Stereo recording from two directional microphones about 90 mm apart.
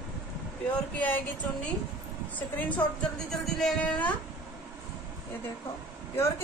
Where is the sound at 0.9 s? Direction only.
15° left (ahead or behind).